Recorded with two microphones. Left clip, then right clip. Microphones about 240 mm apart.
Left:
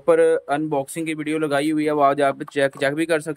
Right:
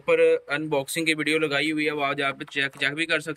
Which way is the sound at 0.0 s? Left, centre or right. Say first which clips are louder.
Left 3 dB; left.